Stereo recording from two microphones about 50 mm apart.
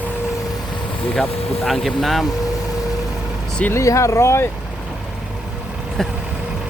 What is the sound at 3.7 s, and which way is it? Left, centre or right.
Speech, left.